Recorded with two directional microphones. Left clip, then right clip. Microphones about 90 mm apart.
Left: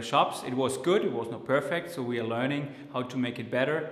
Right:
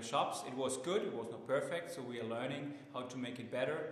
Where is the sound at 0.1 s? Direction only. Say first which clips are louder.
Left 11 dB; 40° right (ahead or behind).